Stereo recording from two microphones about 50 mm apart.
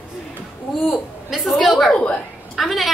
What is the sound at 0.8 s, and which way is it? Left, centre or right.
A woman's voice, centre.